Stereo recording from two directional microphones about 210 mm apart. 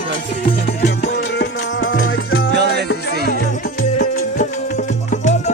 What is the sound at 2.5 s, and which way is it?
Music, 55° right (ahead or behind).